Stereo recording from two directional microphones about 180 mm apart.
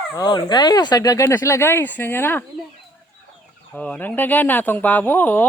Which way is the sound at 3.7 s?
5° left (ahead or behind).